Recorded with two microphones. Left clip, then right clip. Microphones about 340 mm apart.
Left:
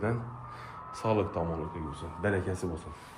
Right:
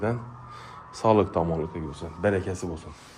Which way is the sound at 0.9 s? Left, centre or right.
Centre.